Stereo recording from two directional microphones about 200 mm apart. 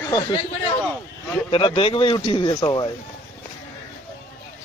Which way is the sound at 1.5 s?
25° left (ahead or behind).